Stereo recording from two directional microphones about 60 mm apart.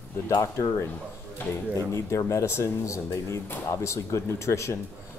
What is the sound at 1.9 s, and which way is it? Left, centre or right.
Speech, left.